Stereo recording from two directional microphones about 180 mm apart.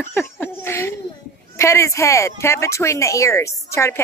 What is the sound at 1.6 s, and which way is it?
A woman's voice, 15° left (ahead or behind).